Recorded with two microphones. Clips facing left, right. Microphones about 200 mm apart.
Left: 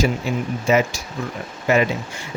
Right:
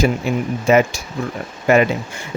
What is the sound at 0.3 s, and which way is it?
Speech, 55° right (ahead or behind).